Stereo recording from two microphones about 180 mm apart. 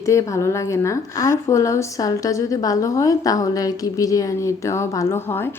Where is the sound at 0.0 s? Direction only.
15° left (ahead or behind).